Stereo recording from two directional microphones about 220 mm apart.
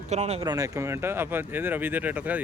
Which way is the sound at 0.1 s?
30° right (ahead or behind).